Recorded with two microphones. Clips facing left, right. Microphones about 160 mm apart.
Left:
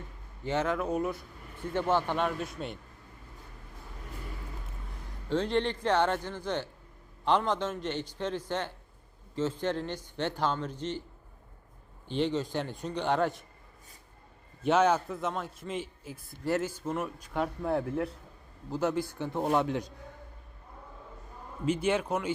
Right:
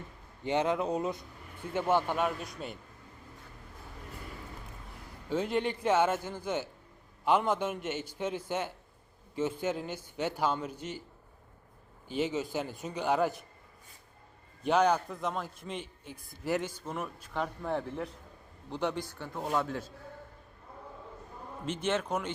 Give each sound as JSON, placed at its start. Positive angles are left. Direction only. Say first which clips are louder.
{"t": 0.4, "sound": "speech", "louder": "right 1 dB", "side_deg": -15}
{"t": 5.3, "sound": "speech", "louder": "left 2 dB", "side_deg": -10}
{"t": 12.0, "sound": "a man's voice", "louder": "left 2 dB", "side_deg": -5}
{"t": 14.6, "sound": "a man's voice", "louder": "left 1 dB", "side_deg": 0}
{"t": 19.2, "sound": "speech", "louder": "left 4 dB", "side_deg": 25}
{"t": 21.7, "sound": "speech", "louder": "left 3 dB", "side_deg": 10}